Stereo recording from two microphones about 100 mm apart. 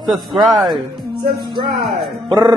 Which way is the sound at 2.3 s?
45° right (ahead or behind).